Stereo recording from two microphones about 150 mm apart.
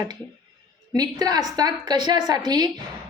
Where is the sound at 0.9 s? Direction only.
25° right (ahead or behind).